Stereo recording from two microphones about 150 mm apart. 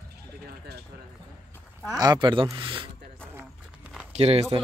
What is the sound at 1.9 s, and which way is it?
Speech, 30° right (ahead or behind).